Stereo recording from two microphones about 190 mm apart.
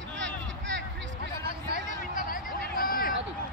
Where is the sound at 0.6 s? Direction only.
65° right (ahead or behind).